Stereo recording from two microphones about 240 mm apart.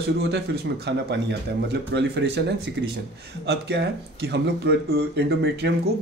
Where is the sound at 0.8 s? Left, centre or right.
Right.